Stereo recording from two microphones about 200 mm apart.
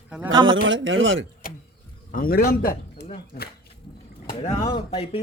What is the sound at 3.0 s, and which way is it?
Speech, 30° left (ahead or behind).